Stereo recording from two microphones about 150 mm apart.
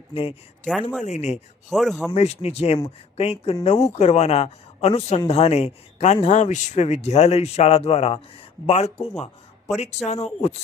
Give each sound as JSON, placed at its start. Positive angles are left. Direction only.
{"t": 0.1, "sound": "speech", "side_deg": 40}
{"t": 0.7, "sound": "speech", "side_deg": 5}
{"t": 1.0, "sound": "speech", "side_deg": 50}
{"t": 1.7, "sound": "speech", "side_deg": 0}
{"t": 2.1, "sound": "speech", "side_deg": 45}